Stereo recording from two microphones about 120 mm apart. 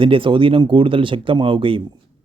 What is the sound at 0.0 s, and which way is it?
Speech, 45° right (ahead or behind).